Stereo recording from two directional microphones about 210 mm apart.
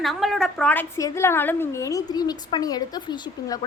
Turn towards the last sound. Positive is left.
turn(degrees=20)  # may be behind; listen again after turning